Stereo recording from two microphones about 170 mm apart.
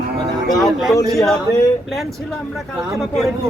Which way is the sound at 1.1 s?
Centre (ahead or behind).